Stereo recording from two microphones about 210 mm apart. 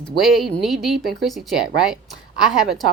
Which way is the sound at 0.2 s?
Centre (ahead or behind).